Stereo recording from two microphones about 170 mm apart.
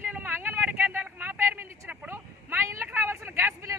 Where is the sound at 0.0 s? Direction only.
10° right (ahead or behind).